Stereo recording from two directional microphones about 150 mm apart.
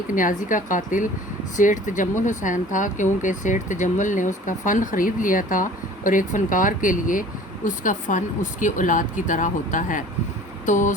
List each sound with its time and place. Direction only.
0.1 s speech: 60° left (ahead or behind)